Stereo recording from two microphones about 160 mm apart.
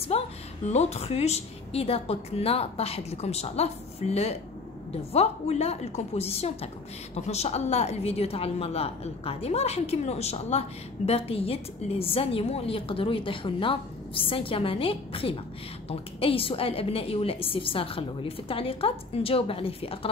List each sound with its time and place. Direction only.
0.1 s a woman's voice: 40° left (ahead or behind)